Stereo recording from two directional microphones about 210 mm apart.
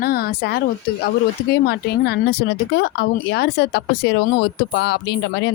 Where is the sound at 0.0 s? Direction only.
45° left (ahead or behind).